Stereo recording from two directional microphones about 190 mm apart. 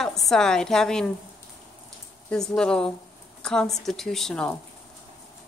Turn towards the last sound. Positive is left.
turn(degrees=5)  # may be behind; listen again after turning